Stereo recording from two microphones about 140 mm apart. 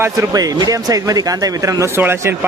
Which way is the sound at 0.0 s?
25° right (ahead or behind).